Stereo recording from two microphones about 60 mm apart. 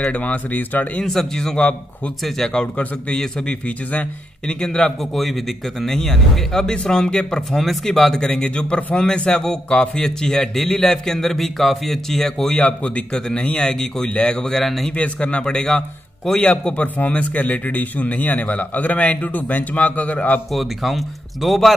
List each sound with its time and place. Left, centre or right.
0.0 s speech: left
1.0 s a man's voice: centre
5.1 s a man's voice: centre
12.6 s a man's voice: centre
15.0 s a man's voice: centre
20.5 s speech: centre